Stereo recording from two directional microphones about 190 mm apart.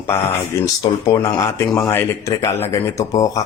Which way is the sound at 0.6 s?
15° left (ahead or behind).